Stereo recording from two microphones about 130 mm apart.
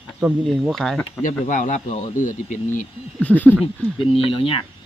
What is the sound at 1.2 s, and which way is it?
Speech, 80° left.